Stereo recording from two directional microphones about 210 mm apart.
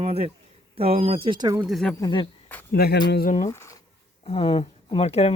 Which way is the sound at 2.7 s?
50° left (ahead or behind).